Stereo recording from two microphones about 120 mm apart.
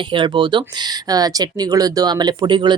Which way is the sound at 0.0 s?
40° right (ahead or behind).